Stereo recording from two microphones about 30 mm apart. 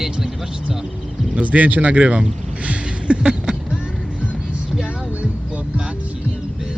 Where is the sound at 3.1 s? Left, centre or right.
Right.